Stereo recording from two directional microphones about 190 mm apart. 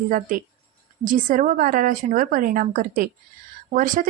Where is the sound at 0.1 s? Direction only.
45° right (ahead or behind).